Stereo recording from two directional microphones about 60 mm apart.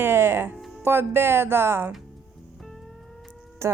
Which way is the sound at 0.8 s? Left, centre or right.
Right.